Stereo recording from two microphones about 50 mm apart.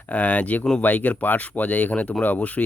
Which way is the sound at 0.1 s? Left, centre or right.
Left.